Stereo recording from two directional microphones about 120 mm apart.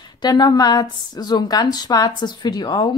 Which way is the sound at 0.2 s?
35° left (ahead or behind).